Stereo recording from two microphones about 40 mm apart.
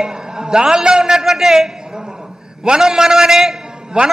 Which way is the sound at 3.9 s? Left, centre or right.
Right.